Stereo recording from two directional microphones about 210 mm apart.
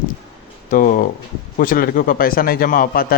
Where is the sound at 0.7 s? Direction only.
40° left (ahead or behind).